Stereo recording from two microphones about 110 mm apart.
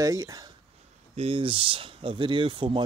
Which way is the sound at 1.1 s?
55° right (ahead or behind).